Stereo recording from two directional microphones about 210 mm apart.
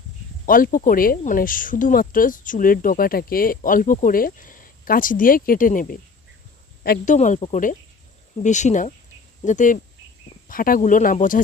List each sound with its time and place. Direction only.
0.4 s speech: 40° left (ahead or behind)